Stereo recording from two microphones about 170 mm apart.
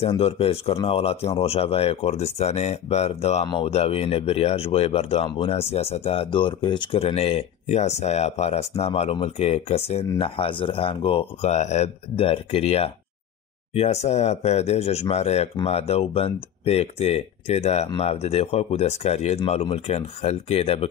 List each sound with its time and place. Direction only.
0.2 s speech: 35° left (ahead or behind)